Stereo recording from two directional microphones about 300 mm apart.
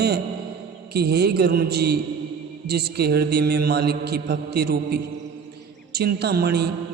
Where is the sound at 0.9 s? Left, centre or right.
Right.